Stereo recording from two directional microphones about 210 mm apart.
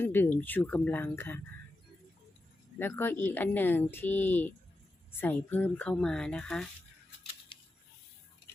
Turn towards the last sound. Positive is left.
turn(degrees=25)  # may be behind; listen again after turning